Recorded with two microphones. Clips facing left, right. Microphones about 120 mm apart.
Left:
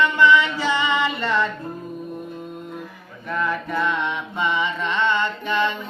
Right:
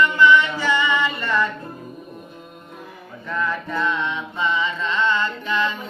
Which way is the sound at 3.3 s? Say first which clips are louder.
Left 1 dB; 15° left (ahead or behind).